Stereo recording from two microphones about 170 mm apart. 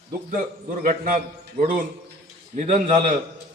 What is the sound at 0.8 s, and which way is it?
Speech, 55° right (ahead or behind).